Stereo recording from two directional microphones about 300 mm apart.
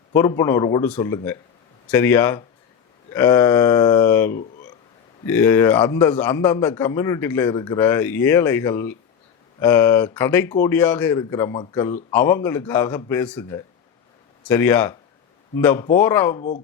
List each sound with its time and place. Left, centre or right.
0.1 s a man's voice: centre
16.4 s speech: left